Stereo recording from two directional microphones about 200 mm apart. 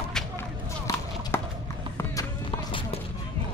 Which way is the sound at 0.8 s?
10° left (ahead or behind).